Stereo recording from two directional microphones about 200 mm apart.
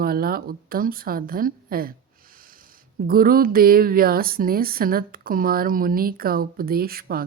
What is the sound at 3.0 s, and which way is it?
A woman's voice, 45° right (ahead or behind).